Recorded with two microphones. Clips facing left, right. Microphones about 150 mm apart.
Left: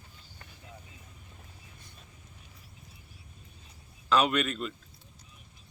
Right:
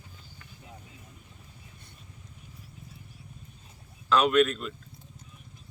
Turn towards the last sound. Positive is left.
turn(degrees=0)  # may be behind; listen again after turning